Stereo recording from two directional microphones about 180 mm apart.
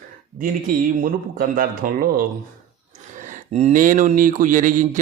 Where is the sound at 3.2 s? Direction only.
45° right (ahead or behind).